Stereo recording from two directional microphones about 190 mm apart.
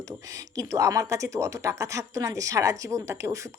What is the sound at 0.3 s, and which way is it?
Speech, 15° right (ahead or behind).